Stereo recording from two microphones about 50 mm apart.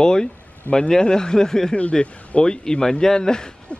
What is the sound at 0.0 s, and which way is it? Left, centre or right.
Speech, centre.